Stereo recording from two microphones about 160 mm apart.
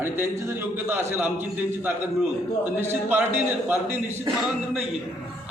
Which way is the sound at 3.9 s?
45° right (ahead or behind).